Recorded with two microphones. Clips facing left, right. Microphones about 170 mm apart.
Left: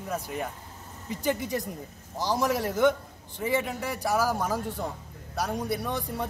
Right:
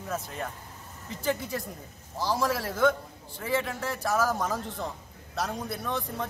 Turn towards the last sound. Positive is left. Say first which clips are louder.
# left 2 dB
turn(degrees=10)  # may be behind; listen again after turning